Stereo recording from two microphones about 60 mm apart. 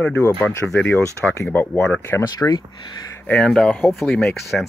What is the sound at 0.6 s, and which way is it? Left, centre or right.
Speech, centre.